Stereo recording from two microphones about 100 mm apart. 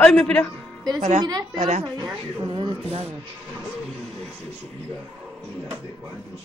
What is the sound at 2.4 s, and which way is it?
Speech, 50° right (ahead or behind).